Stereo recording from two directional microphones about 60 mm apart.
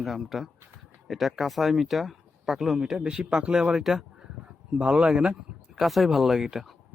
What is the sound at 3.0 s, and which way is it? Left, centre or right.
Speech, centre.